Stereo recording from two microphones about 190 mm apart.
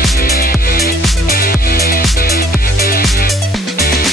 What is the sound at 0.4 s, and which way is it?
Music, 50° left (ahead or behind).